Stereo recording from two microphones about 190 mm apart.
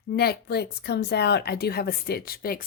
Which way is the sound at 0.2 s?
55° left (ahead or behind).